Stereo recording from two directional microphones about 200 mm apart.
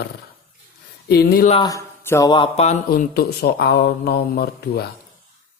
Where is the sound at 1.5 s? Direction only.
20° left (ahead or behind).